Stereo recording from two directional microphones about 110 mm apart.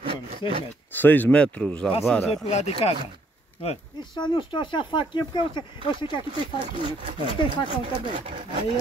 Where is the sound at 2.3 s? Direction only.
70° left (ahead or behind).